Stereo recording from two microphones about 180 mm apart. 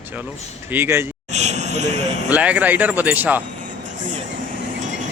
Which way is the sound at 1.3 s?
40° right (ahead or behind).